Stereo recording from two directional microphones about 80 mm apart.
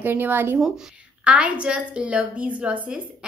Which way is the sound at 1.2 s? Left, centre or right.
Centre.